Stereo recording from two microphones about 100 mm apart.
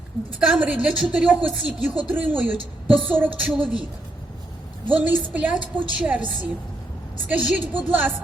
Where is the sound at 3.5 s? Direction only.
5° right (ahead or behind).